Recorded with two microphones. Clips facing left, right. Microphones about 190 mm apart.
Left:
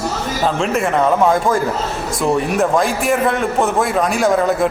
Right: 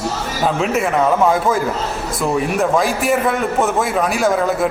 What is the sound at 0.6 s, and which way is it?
A man's voice, centre (ahead or behind).